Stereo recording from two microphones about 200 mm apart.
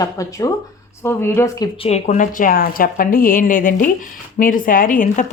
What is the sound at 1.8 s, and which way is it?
A woman's voice, 35° left (ahead or behind).